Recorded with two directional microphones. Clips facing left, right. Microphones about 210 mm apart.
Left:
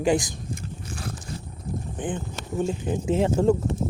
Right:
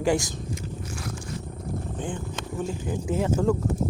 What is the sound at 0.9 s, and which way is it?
Zipper, 30° left (ahead or behind).